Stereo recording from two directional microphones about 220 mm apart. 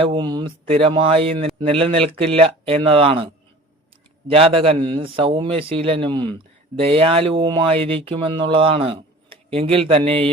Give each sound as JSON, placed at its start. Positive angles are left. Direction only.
{"t": 0.0, "sound": "a man's voice", "side_deg": -20}
{"t": 4.3, "sound": "a man's voice", "side_deg": -25}